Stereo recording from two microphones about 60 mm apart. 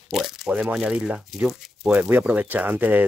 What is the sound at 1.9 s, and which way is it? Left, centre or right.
Speech, right.